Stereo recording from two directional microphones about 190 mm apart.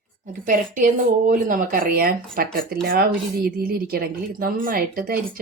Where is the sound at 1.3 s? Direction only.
45° right (ahead or behind).